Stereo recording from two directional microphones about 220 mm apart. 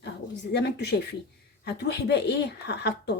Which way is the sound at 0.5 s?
50° left (ahead or behind).